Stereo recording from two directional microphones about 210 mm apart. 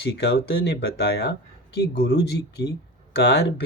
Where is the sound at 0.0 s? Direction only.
50° left (ahead or behind).